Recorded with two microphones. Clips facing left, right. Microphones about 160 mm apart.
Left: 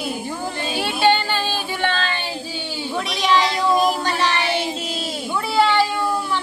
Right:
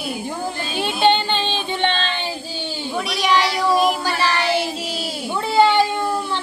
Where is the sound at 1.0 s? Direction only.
20° right (ahead or behind).